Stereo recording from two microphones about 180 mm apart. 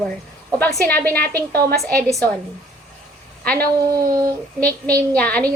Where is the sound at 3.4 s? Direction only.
5° left (ahead or behind).